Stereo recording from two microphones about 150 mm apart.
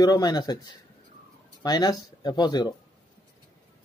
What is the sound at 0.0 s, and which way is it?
Speech, 25° left (ahead or behind).